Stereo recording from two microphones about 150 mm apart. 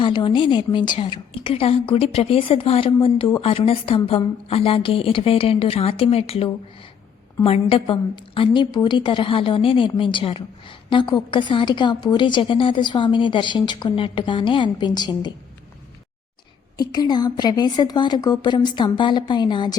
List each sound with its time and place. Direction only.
0.0 s a woman's voice: 35° left (ahead or behind)
16.7 s a woman's voice: 25° left (ahead or behind)